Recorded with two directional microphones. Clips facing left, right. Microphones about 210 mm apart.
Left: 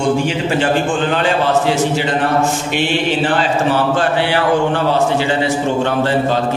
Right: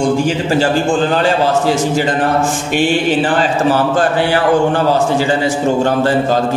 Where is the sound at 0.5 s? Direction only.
35° right (ahead or behind).